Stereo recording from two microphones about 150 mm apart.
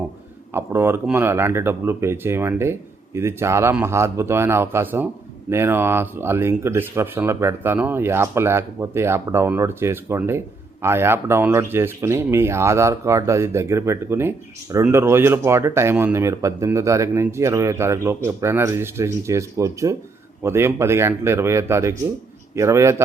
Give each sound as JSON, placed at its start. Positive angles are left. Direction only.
{"t": 0.5, "sound": "speech", "side_deg": -15}